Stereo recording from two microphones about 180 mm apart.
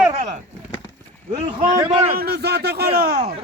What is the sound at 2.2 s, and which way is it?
Speech, 65° right (ahead or behind).